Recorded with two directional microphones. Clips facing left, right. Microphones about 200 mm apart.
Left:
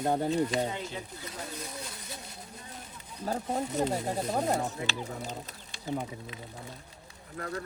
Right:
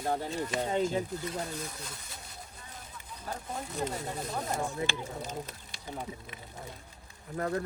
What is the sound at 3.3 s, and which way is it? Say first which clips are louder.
Speech: left 7 dB; 30° left (ahead or behind).